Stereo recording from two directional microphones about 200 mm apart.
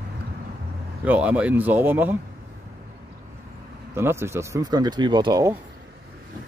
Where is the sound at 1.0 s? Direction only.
5° right (ahead or behind).